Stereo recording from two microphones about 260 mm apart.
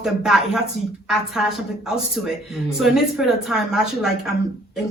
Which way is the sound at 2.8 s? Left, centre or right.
Centre.